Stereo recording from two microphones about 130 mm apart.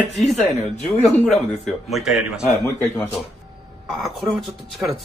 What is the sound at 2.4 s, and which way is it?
Speech, 20° left (ahead or behind).